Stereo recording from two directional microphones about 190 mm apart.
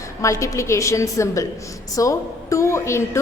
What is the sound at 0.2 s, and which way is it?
A woman's voice, 15° left (ahead or behind).